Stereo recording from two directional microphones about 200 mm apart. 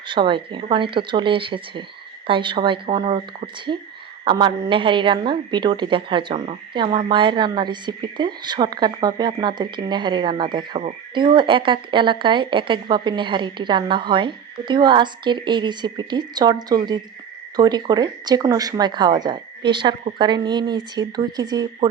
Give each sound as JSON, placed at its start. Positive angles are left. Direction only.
{"t": 0.1, "sound": "speech", "side_deg": -25}